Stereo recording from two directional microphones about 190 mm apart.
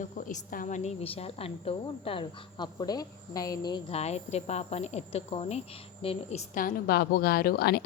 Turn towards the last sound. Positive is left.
turn(degrees=55)  # may be behind; listen again after turning